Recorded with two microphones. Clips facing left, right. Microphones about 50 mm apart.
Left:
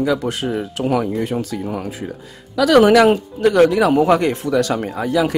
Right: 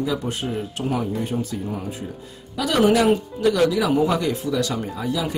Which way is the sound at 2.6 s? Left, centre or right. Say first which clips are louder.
Left 7 dB; left.